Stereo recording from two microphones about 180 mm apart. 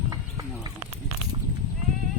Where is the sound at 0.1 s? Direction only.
20° right (ahead or behind).